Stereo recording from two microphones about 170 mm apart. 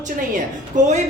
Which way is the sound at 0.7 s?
45° right (ahead or behind).